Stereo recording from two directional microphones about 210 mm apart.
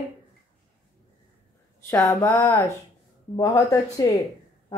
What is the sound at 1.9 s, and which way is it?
A woman's voice, 10° left (ahead or behind).